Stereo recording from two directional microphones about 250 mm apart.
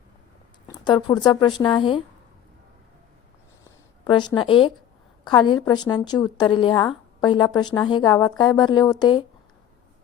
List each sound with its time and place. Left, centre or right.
1.0 s a woman's voice: centre
4.1 s a woman's voice: centre